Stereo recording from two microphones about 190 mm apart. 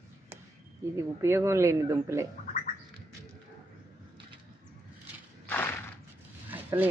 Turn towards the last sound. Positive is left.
turn(degrees=-10)  # may be behind; listen again after turning